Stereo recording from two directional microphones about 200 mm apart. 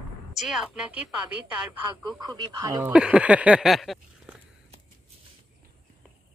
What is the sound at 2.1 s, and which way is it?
Speech, 20° right (ahead or behind).